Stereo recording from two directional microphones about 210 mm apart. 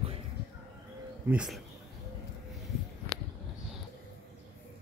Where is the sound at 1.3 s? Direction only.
5° right (ahead or behind).